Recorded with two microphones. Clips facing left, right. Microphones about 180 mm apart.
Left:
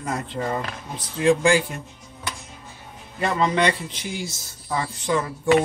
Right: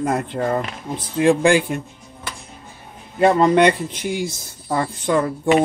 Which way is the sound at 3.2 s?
55° right (ahead or behind).